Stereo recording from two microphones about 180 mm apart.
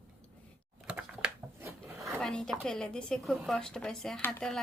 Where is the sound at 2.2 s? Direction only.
5° left (ahead or behind).